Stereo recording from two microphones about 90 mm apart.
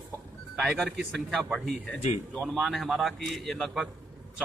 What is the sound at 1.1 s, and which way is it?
A man's voice, 5° left (ahead or behind).